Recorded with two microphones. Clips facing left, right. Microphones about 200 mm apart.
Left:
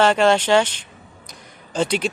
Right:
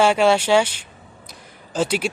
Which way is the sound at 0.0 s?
10° right (ahead or behind).